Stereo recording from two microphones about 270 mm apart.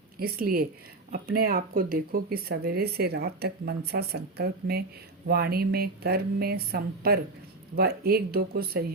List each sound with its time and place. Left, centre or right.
0.2 s speech: right